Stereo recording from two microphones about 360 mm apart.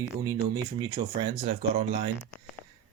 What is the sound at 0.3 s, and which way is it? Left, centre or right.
Speech, centre.